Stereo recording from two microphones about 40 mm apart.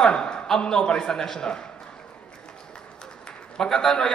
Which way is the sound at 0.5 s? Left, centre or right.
Centre.